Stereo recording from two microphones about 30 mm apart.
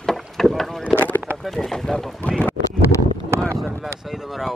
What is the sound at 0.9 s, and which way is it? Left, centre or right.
Boat, left.